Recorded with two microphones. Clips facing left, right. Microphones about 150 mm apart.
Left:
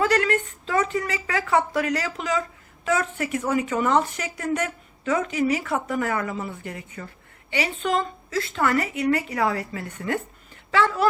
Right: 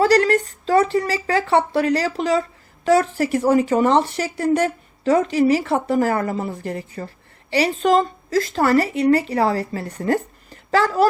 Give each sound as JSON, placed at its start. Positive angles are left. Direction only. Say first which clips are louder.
{"t": 0.0, "sound": "a woman's voice", "louder": "right 6 dB", "side_deg": -35}